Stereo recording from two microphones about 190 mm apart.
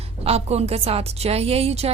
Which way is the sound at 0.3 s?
35° right (ahead or behind).